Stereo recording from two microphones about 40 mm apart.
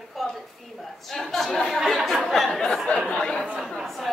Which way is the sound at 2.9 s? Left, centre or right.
Left.